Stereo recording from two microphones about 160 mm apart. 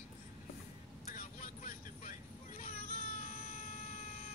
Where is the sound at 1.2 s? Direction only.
55° left (ahead or behind).